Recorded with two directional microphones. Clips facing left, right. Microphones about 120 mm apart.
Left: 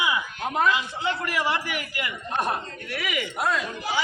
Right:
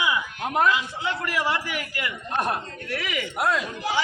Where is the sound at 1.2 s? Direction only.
20° left (ahead or behind).